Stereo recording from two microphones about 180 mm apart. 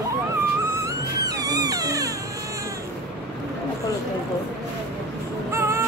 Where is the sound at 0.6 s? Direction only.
15° right (ahead or behind).